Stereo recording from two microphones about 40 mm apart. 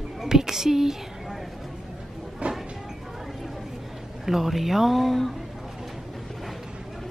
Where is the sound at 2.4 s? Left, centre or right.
Right.